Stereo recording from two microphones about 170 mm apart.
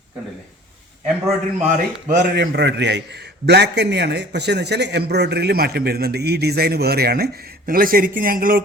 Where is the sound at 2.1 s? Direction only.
70° right (ahead or behind).